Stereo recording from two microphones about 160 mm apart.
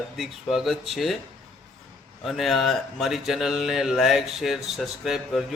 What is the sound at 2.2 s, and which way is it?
Speech, centre (ahead or behind).